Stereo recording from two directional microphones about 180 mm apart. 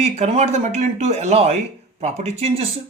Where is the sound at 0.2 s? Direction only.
35° right (ahead or behind).